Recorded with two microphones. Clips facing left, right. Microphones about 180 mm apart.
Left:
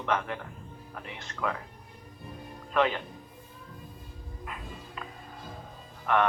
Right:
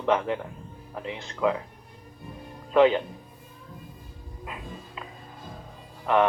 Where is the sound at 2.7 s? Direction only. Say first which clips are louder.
Right 8 dB; 20° right (ahead or behind).